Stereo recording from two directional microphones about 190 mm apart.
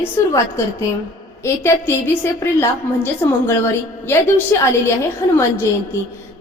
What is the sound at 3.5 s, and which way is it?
A woman's voice, 15° left (ahead or behind).